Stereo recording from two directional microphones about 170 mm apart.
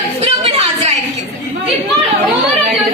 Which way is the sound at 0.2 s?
40° right (ahead or behind).